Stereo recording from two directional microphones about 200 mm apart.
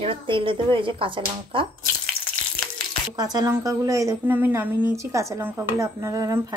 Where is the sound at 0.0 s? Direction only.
25° right (ahead or behind).